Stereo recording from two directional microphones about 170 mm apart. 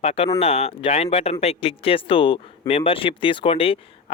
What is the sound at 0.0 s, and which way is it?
Speech, 40° left (ahead or behind).